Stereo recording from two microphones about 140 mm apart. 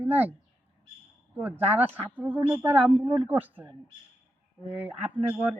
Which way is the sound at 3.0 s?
35° right (ahead or behind).